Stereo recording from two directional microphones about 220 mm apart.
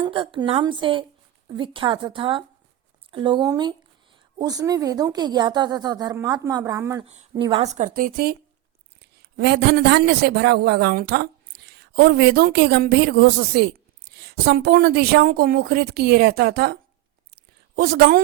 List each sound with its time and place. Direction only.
0.0 s speech: 25° right (ahead or behind)
7.0 s a woman's voice: 30° right (ahead or behind); by 16.7 s 45° right (ahead or behind)
17.3 s a sound: 45° right (ahead or behind)